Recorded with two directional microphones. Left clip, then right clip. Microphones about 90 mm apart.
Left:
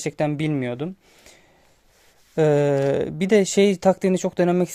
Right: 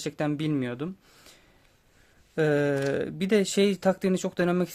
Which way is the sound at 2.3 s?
45° left (ahead or behind).